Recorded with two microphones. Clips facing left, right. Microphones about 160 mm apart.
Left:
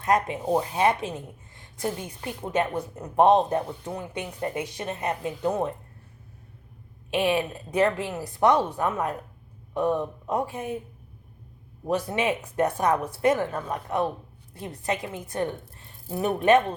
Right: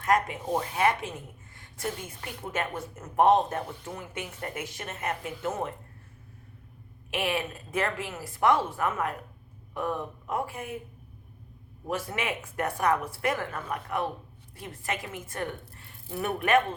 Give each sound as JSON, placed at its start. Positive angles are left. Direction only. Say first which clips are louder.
{"t": 0.0, "sound": "speech", "louder": "left 2 dB", "side_deg": 20}
{"t": 7.7, "sound": "speech", "louder": "left 7 dB", "side_deg": 20}
{"t": 11.9, "sound": "speech", "louder": "left 6 dB", "side_deg": 20}